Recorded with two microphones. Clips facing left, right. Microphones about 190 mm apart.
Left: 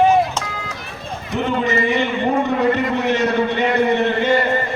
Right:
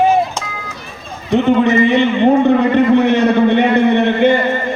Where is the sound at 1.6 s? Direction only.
65° right (ahead or behind).